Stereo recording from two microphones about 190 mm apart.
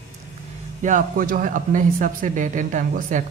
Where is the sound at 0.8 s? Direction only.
45° right (ahead or behind).